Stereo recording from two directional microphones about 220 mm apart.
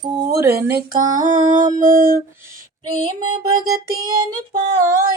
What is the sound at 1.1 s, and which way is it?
Music, 35° right (ahead or behind).